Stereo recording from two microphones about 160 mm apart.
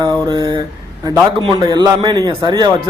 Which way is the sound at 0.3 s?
25° right (ahead or behind).